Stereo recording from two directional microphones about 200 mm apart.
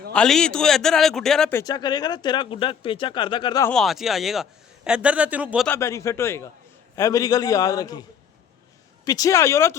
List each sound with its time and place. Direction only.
0.1 s a man's voice: 5° left (ahead or behind); by 3.7 s 20° left (ahead or behind)
3.7 s a man's voice: centre (ahead or behind)
5.6 s a man's voice: 10° left (ahead or behind)
9.0 s a man's voice: 15° left (ahead or behind)